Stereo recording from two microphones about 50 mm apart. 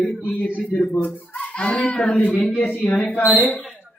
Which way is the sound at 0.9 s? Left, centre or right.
Left.